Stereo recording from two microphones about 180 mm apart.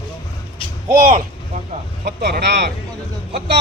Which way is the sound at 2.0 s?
70° right (ahead or behind).